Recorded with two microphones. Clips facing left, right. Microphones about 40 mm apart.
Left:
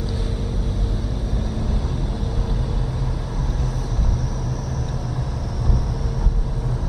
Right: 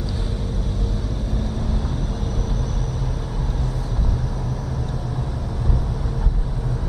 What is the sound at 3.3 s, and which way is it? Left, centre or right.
Vehicle, right.